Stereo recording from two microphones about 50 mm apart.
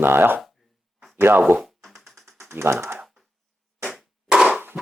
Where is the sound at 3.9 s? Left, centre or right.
Centre.